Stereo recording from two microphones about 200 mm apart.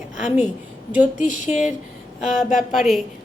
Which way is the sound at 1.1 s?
70° right (ahead or behind).